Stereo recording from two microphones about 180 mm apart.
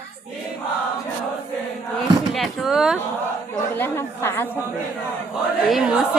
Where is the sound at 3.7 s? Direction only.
10° left (ahead or behind).